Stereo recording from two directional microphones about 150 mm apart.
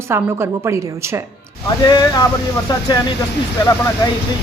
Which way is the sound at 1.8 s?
30° left (ahead or behind).